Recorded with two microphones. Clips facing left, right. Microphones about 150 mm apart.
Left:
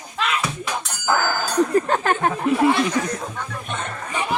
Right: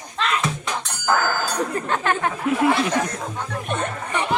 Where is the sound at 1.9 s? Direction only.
35° left (ahead or behind).